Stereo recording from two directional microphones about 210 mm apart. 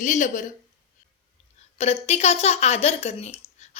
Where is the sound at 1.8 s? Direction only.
30° left (ahead or behind).